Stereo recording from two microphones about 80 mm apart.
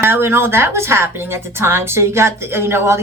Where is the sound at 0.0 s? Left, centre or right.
Right.